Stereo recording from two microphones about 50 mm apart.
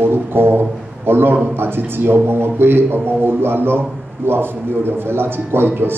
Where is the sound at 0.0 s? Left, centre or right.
Right.